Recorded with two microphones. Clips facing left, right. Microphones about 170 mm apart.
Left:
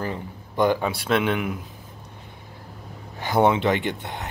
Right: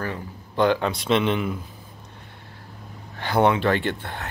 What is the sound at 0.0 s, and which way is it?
Speech, 15° left (ahead or behind).